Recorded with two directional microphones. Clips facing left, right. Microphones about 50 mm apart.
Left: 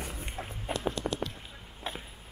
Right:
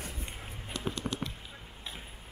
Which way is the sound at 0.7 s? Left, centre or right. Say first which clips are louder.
Left 6 dB; left.